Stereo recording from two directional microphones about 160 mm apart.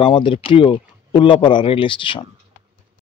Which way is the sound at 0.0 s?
35° left (ahead or behind).